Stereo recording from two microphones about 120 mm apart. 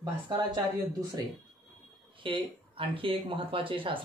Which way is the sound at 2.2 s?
45° right (ahead or behind).